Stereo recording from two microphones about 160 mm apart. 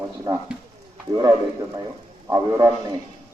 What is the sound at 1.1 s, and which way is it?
A man's voice, 20° right (ahead or behind).